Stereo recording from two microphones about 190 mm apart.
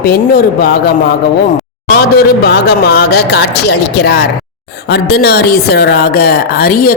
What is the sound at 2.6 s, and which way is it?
A woman's voice, 60° left (ahead or behind).